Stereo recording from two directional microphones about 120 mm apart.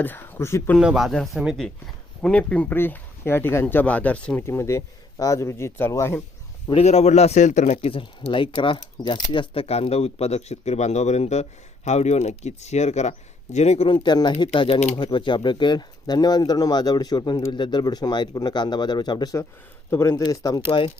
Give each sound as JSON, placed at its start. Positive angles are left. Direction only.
{"t": 0.0, "sound": "speech", "side_deg": 15}
{"t": 0.8, "sound": "speech", "side_deg": -5}
{"t": 4.4, "sound": "speech", "side_deg": 25}
{"t": 6.8, "sound": "speech", "side_deg": 65}
{"t": 13.8, "sound": "speech", "side_deg": 40}
{"t": 14.9, "sound": "speech", "side_deg": 45}